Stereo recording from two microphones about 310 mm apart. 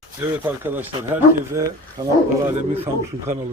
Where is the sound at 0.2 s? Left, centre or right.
Centre.